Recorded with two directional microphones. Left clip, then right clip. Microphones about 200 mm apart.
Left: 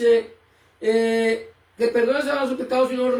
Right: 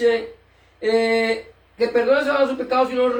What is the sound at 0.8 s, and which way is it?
Speech, centre (ahead or behind).